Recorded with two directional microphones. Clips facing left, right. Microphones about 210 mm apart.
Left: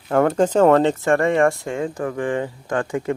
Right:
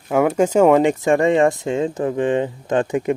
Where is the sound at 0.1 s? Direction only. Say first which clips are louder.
Right 1 dB; 10° right (ahead or behind).